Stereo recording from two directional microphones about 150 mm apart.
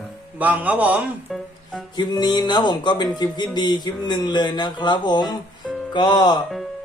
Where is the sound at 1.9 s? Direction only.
30° left (ahead or behind).